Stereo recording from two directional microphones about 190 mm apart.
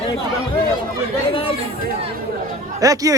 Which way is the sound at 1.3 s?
30° left (ahead or behind).